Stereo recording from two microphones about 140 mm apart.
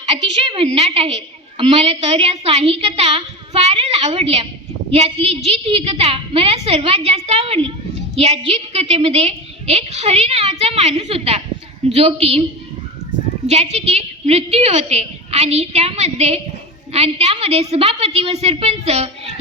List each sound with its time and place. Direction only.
0.1 s a woman's voice: 40° right (ahead or behind)
13.5 s a woman's voice: 50° right (ahead or behind)